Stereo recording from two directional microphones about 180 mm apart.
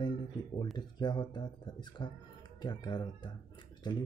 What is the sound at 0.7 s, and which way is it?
Speech, 25° left (ahead or behind).